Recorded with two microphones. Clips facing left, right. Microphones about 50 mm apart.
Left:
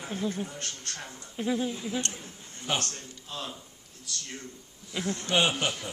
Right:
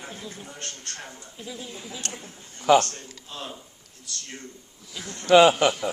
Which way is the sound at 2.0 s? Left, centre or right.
Right.